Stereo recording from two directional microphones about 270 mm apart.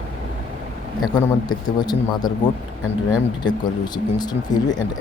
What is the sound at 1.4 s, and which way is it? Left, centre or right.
Speech, centre.